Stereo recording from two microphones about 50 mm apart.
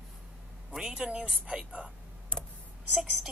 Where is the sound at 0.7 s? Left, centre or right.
Centre.